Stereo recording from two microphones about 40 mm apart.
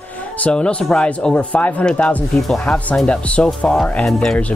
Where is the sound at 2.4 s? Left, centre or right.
Centre.